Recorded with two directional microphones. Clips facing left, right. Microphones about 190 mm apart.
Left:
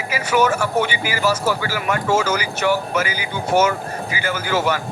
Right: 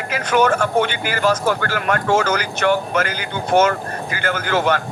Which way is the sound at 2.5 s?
10° left (ahead or behind).